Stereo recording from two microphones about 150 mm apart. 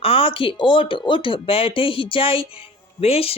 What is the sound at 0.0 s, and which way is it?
Speech, 40° left (ahead or behind).